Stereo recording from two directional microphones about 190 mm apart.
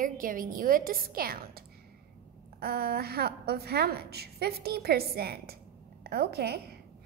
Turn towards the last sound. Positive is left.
turn(degrees=-55)  # may be behind; listen again after turning